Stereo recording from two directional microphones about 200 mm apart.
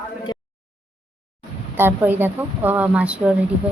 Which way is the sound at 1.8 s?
10° right (ahead or behind).